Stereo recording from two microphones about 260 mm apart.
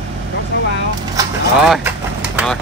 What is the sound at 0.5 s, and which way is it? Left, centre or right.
Vehicle, left.